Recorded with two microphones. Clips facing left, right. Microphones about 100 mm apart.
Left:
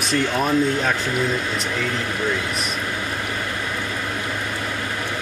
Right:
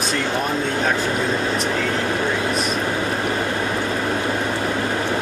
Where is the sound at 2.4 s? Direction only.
30° right (ahead or behind).